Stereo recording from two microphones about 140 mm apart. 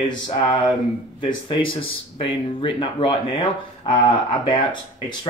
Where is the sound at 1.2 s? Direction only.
40° left (ahead or behind).